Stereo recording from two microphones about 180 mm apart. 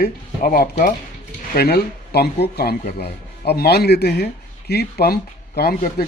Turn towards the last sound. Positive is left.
turn(degrees=55)  # may be behind; listen again after turning